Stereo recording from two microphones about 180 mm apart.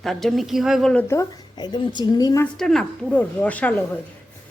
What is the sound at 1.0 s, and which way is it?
A woman's voice, 20° left (ahead or behind).